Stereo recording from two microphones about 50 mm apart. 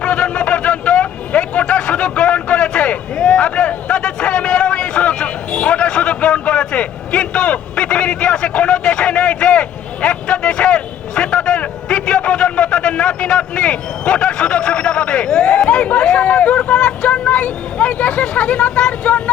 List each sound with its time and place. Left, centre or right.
0.0 s vehicle: left